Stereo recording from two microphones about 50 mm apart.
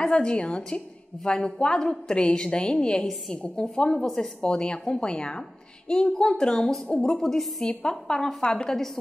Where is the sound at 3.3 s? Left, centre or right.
Centre.